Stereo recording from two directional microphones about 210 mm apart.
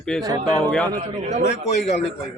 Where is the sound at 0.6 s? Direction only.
5° left (ahead or behind).